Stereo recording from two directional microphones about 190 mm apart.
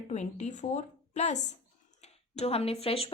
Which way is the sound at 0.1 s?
40° left (ahead or behind).